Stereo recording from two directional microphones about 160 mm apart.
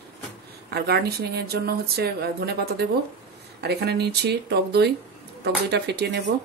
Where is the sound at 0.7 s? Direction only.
90° right.